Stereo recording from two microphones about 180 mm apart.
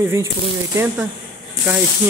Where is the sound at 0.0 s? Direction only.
15° right (ahead or behind).